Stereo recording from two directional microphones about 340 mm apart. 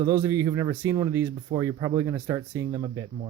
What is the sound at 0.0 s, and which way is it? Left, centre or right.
Speech, centre.